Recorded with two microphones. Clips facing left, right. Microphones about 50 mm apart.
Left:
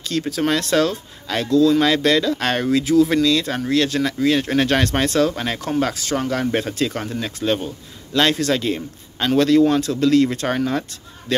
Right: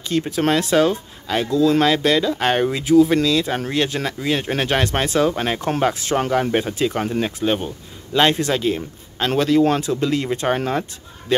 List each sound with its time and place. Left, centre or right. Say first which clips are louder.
0.1 s speech: right 2 dB; centre
6.5 s a man's voice: right 2 dB; centre